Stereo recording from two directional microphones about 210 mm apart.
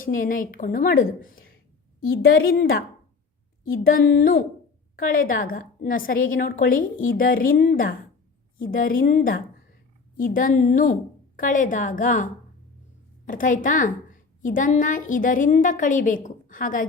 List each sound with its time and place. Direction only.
0.0 s a woman's voice: 40° left (ahead or behind)